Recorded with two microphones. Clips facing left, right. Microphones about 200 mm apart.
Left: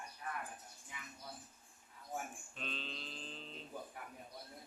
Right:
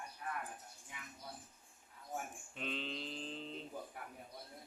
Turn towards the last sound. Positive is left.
turn(degrees=-20)  # may be behind; listen again after turning